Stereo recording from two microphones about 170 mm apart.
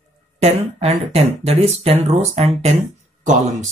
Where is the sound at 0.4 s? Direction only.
40° right (ahead or behind).